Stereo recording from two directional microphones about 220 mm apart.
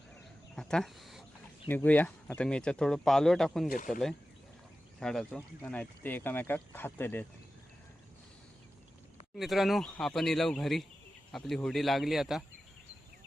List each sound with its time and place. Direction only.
0.5 s speech: 5° left (ahead or behind)
9.4 s speech: centre (ahead or behind)